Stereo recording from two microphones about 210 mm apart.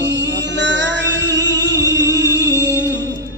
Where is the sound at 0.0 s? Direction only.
60° right (ahead or behind).